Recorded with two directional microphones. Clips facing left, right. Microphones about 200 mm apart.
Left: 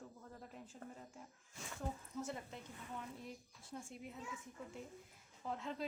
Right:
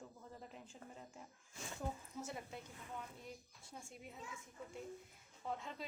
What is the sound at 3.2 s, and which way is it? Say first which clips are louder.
Speech: left 2 dB; centre (ahead or behind).